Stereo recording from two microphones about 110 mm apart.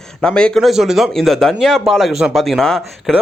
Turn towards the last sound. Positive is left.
turn(degrees=0)  # may be behind; listen again after turning